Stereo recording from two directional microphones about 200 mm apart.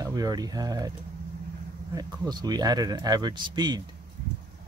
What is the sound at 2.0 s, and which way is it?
Speech, 20° right (ahead or behind).